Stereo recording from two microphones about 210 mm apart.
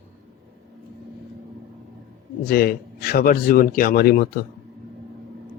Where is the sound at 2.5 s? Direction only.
45° left (ahead or behind).